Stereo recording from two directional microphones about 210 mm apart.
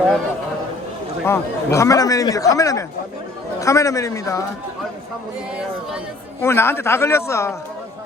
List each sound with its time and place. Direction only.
1.2 s a man's voice: 10° left (ahead or behind)
6.4 s a man's voice: 10° left (ahead or behind)